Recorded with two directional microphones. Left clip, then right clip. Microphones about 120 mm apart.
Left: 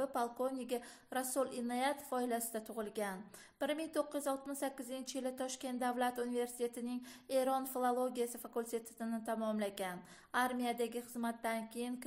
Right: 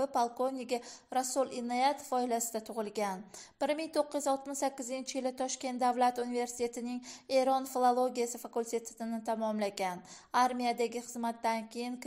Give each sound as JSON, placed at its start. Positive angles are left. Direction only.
{"t": 0.0, "sound": "a woman's voice", "side_deg": -25}